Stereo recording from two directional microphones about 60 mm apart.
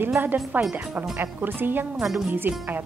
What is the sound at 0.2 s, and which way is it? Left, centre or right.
Speech, right.